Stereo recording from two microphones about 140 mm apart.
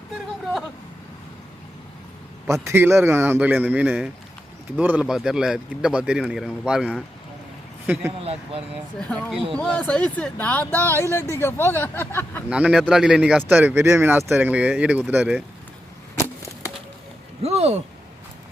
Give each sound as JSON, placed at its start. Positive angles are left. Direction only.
{"t": 2.5, "sound": "speech", "side_deg": -20}
{"t": 8.2, "sound": "speech", "side_deg": -45}
{"t": 9.0, "sound": "speech", "side_deg": 10}
{"t": 12.5, "sound": "speech", "side_deg": -10}
{"t": 17.4, "sound": "speech", "side_deg": -50}